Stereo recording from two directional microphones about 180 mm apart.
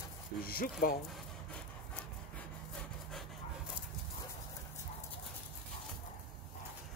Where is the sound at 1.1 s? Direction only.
5° left (ahead or behind).